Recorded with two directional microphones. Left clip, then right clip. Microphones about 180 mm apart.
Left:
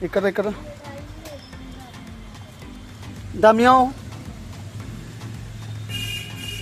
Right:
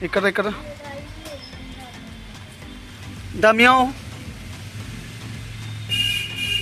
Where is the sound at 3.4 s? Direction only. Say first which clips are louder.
Even; 5° left (ahead or behind).